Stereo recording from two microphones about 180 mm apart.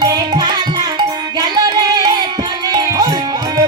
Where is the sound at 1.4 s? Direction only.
25° right (ahead or behind).